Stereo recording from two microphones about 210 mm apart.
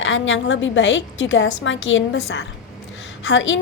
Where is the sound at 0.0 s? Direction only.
65° left (ahead or behind).